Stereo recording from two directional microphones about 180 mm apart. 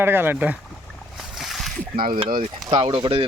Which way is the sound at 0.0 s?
10° right (ahead or behind).